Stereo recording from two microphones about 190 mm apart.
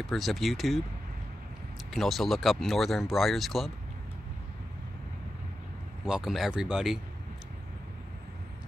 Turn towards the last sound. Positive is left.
turn(degrees=-5)  # may be behind; listen again after turning